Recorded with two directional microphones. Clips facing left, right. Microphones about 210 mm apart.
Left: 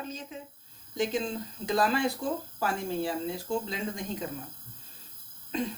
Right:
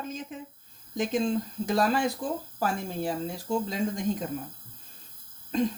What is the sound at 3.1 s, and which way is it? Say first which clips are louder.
Speech: right 1 dB; 40° right (ahead or behind).